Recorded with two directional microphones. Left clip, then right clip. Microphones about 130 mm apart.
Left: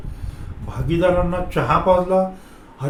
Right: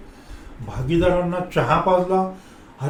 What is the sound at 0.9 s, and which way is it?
A man's voice, 25° left (ahead or behind).